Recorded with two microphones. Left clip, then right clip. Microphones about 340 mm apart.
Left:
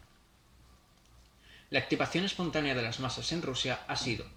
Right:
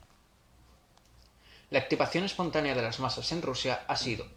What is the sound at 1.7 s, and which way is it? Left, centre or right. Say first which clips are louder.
Speech: right 3 dB; centre.